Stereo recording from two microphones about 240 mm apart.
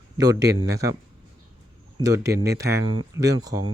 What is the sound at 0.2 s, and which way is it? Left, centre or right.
Speech, centre.